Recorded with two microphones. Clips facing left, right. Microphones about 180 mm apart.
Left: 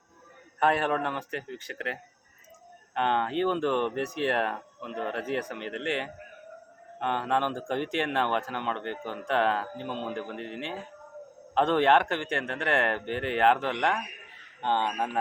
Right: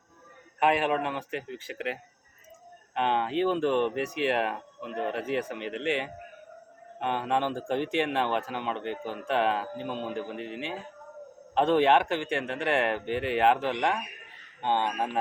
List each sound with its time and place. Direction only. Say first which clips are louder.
0.6 s a man's voice: right 1 dB; 15° right (ahead or behind)